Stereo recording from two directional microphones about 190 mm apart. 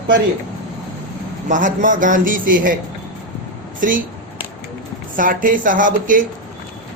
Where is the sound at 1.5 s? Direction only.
45° right (ahead or behind).